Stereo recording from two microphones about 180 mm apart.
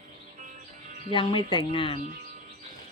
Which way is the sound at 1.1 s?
30° left (ahead or behind).